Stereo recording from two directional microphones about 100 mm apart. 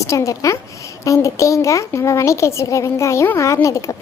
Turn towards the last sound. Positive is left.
turn(degrees=30)  # may be behind; listen again after turning